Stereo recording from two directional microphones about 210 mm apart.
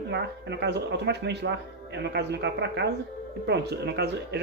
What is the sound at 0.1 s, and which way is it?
Speech, 55° right (ahead or behind).